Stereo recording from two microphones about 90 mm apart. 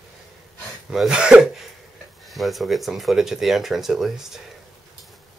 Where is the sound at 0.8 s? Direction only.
10° right (ahead or behind).